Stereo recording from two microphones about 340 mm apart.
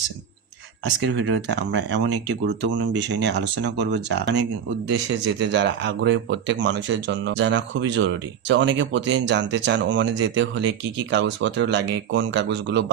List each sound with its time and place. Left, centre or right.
1.5 s speech: right